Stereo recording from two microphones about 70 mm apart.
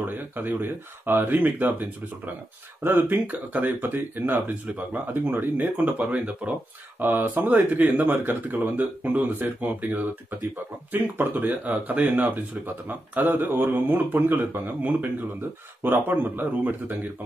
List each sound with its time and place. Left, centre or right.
0.0 s speech: right
8.1 s speech: right
8.5 s speech: right